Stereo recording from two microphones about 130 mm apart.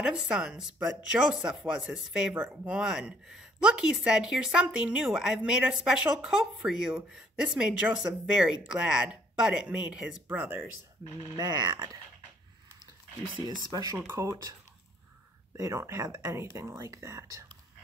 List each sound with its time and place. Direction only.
0.0 s speech: 5° right (ahead or behind)
11.3 s speech: 30° right (ahead or behind)
13.5 s speech: 30° right (ahead or behind)
15.5 s speech: 25° right (ahead or behind)